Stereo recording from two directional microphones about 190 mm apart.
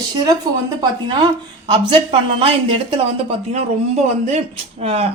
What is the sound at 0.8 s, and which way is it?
Speech, 25° right (ahead or behind).